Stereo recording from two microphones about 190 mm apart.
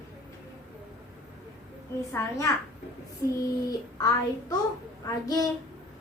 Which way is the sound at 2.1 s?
15° left (ahead or behind).